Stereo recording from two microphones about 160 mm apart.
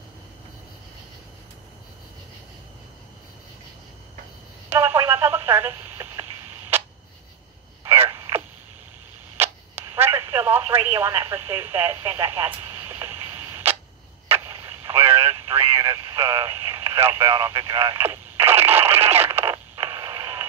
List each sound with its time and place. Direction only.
4.6 s radio: 15° right (ahead or behind)
7.8 s a sound: 15° right (ahead or behind)
9.4 s telephone: 15° right (ahead or behind)
12.7 s a sound: 15° right (ahead or behind)
14.3 s vehicle: 15° right (ahead or behind)
16.2 s speech: 15° right (ahead or behind)
18.4 s radio: 15° right (ahead or behind)